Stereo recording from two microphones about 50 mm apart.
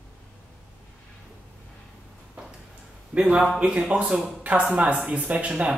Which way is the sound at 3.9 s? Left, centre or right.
Right.